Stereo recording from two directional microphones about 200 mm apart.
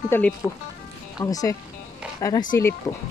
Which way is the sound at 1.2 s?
15° left (ahead or behind).